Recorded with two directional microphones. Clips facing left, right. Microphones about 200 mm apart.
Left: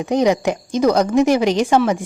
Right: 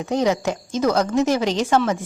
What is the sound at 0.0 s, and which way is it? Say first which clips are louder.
A woman's voice: left 4 dB; 15° left (ahead or behind).